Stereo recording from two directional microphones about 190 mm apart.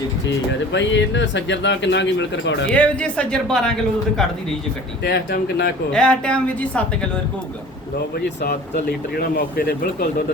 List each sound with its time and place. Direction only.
0.7 s speech: 70° left (ahead or behind)
2.7 s speech: 5° left (ahead or behind)
5.0 s speech: 60° left (ahead or behind)
5.9 s speech: 5° left (ahead or behind)
8.2 s speech: 55° left (ahead or behind)